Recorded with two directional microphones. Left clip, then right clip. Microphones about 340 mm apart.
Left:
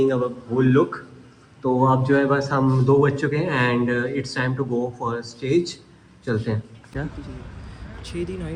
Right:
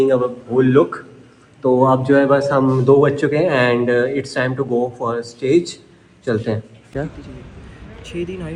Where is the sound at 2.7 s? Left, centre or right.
Right.